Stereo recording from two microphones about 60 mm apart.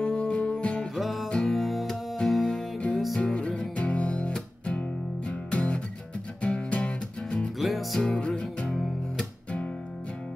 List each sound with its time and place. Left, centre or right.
0.0 s music: centre
0.9 s music: centre
3.2 s music: centre
7.5 s music: centre
8.0 s music: centre